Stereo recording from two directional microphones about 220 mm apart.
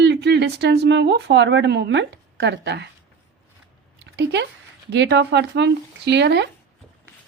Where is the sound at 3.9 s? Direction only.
55° right (ahead or behind).